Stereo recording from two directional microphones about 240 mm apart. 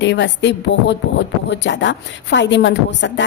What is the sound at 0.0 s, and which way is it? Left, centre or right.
A woman's voice, left.